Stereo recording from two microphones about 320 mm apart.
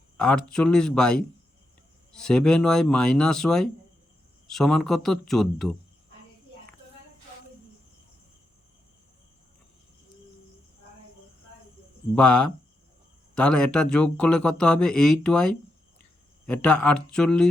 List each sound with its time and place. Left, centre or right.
0.5 s speech: centre
12.2 s speech: left
13.3 s speech: centre